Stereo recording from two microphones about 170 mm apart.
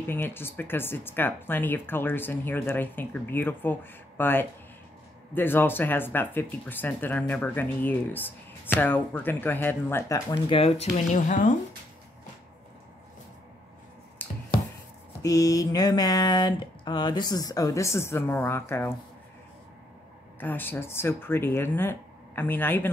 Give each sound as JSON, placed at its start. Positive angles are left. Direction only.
{"t": 0.1, "sound": "speech", "side_deg": 15}
{"t": 10.5, "sound": "speech", "side_deg": 35}
{"t": 11.1, "sound": "speech", "side_deg": 50}
{"t": 14.2, "sound": "finger snapping", "side_deg": 10}
{"t": 15.2, "sound": "a sound", "side_deg": 20}
{"t": 20.3, "sound": "speech", "side_deg": 10}